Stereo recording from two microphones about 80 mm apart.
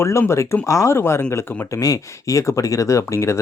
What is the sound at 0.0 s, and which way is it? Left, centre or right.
Speech, left.